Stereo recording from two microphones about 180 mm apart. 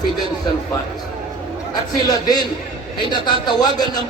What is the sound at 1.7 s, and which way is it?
Speech, 20° left (ahead or behind).